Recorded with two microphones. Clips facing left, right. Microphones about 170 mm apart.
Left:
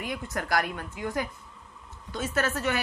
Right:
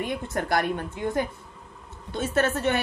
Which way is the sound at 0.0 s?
25° right (ahead or behind).